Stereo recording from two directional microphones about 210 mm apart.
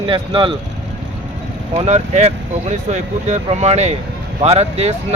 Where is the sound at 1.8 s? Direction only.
30° right (ahead or behind).